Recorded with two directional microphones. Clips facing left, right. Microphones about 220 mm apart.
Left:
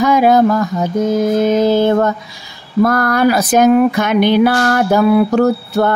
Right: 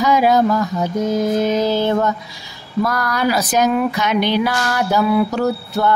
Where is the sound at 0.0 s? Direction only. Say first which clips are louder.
Left 4 dB; 50° left (ahead or behind).